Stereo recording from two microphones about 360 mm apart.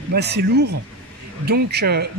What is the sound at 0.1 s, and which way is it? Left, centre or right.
Speech, right.